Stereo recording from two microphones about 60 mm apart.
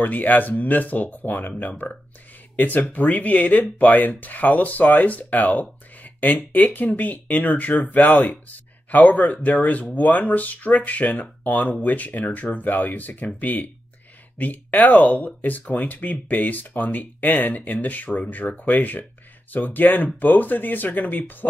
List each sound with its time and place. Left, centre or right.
0.0 s speech: left